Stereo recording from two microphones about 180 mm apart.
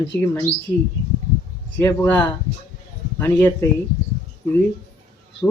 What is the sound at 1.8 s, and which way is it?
Speech, 15° left (ahead or behind).